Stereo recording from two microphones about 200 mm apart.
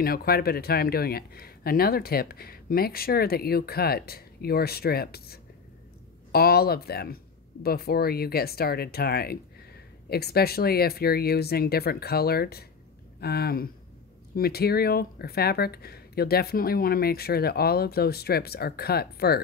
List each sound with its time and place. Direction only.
0.0 s speech: 50° left (ahead or behind)